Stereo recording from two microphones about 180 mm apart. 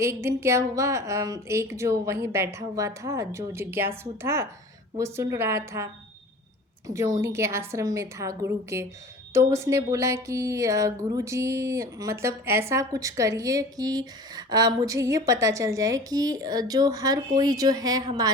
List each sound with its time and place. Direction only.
0.0 s a woman's voice: 15° right (ahead or behind)